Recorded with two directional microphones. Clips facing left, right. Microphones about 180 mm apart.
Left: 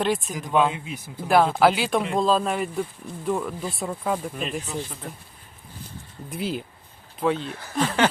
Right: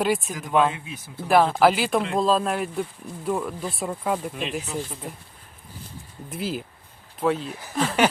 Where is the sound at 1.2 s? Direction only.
Centre (ahead or behind).